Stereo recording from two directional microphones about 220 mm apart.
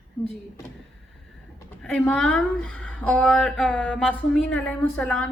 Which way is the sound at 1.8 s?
5° left (ahead or behind).